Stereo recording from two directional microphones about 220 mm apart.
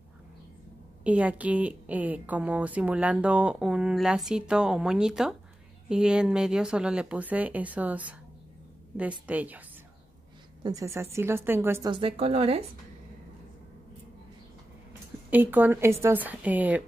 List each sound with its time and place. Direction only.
1.0 s a woman's voice: 5° right (ahead or behind)
10.6 s a woman's voice: 15° right (ahead or behind)
11.9 s speech: 25° right (ahead or behind)
15.2 s a woman's voice: 10° right (ahead or behind)